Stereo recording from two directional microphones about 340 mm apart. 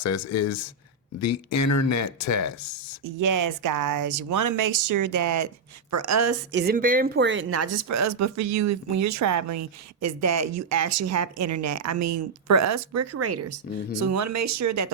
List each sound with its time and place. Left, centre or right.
0.0 s speech: left
3.0 s speech: right
6.5 s speech: right